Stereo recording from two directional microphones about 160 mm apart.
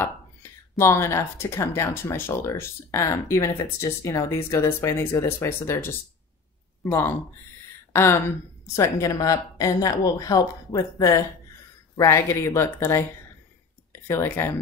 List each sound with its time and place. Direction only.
0.0 s speech: 15° left (ahead or behind)
7.9 s a sound: 15° left (ahead or behind)
8.7 s speech: 20° left (ahead or behind)
14.0 s speech: 15° left (ahead or behind)